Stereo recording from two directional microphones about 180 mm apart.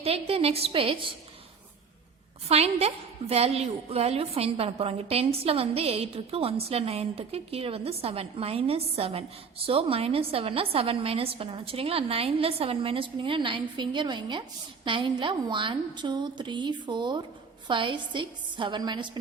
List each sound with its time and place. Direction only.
0.0 s a woman's voice: 35° right (ahead or behind)
2.5 s a woman's voice: 35° right (ahead or behind)